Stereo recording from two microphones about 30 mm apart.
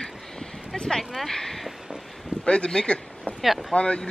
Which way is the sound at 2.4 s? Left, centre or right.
Left.